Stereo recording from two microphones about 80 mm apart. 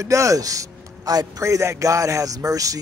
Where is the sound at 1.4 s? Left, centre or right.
Right.